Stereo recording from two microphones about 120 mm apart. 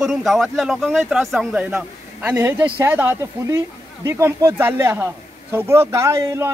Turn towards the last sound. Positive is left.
turn(degrees=-25)  # may be behind; listen again after turning